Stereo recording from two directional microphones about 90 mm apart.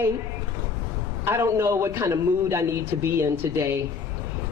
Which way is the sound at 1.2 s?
30° right (ahead or behind).